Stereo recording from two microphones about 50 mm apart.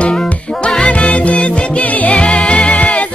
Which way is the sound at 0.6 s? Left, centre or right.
Left.